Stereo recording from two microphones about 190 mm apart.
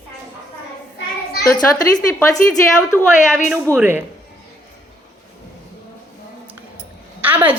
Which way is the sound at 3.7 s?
10° right (ahead or behind).